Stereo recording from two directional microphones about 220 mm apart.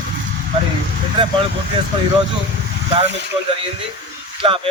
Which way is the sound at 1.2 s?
20° right (ahead or behind).